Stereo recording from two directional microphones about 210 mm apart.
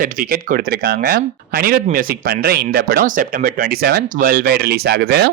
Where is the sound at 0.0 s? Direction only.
40° right (ahead or behind).